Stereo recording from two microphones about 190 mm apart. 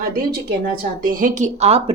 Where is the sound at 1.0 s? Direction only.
45° right (ahead or behind).